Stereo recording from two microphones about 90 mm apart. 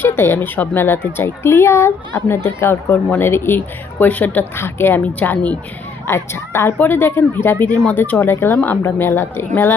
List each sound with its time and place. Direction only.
0.0 s speech: 25° left (ahead or behind)